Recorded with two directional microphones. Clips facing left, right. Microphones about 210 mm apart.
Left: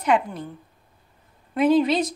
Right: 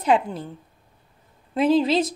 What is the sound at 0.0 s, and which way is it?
Speech, 30° right (ahead or behind).